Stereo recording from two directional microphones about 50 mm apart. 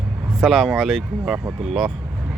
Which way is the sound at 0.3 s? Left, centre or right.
Centre.